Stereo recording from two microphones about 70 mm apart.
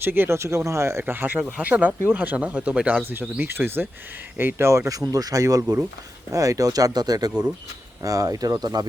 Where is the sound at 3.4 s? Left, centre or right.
Right.